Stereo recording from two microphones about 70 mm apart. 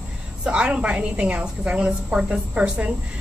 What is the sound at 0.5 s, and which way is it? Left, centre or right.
A woman's voice, centre.